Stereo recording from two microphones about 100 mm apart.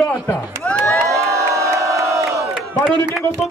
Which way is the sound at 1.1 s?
30° right (ahead or behind).